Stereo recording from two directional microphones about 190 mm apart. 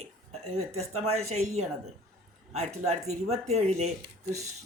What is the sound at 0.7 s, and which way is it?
Speech, 35° right (ahead or behind).